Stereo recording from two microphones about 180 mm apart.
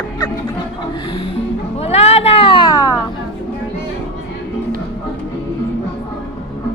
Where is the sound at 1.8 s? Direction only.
35° left (ahead or behind).